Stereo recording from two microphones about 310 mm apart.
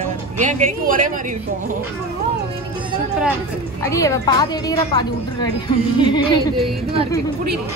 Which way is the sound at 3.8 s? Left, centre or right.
Centre.